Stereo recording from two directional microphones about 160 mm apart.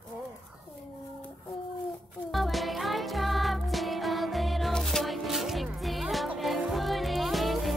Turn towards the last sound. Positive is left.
turn(degrees=0)  # may be behind; listen again after turning